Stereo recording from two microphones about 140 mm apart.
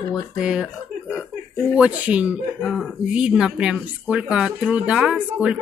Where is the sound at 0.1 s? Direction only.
5° right (ahead or behind).